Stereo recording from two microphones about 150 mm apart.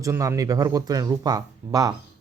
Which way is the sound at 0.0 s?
20° right (ahead or behind).